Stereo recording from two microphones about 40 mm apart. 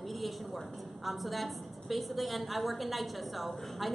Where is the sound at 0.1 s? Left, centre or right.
Centre.